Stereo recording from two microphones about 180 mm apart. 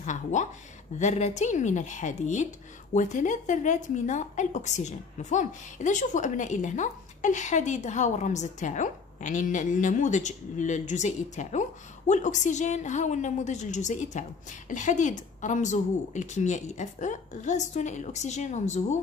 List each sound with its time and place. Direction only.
0.0 s a woman's voice: 45° left (ahead or behind)